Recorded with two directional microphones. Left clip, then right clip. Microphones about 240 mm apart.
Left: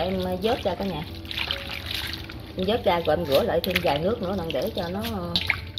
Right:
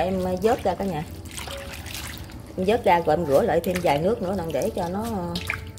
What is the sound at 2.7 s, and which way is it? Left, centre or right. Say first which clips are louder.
Speech: right 3 dB; centre.